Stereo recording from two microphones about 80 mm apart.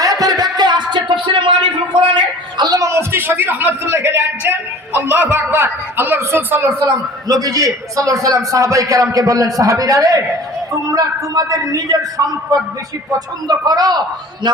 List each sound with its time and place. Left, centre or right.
0.0 s music: right
2.0 s a sound: right
4.0 s a man's voice: right
6.8 s a man's voice: right